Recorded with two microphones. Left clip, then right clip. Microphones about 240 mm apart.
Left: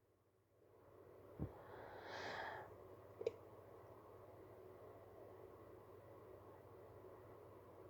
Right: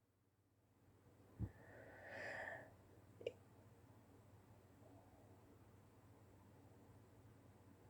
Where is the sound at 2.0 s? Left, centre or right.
Centre.